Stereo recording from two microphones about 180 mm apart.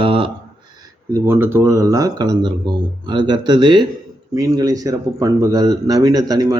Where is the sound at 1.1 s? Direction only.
15° right (ahead or behind).